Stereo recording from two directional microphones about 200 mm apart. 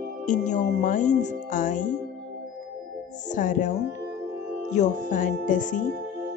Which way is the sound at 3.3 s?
40° left (ahead or behind).